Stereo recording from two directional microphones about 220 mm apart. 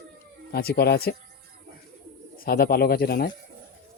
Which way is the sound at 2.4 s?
45° left (ahead or behind).